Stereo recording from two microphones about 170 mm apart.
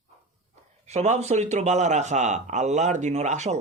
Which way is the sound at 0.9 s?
40° right (ahead or behind).